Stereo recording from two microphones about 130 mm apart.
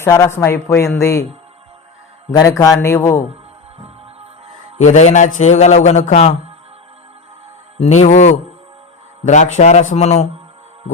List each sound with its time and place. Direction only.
0.0 s a man's voice: 20° left (ahead or behind)
2.3 s a man's voice: 25° left (ahead or behind)
4.8 s a man's voice: 65° left (ahead or behind)
7.8 s a man's voice: 60° left (ahead or behind)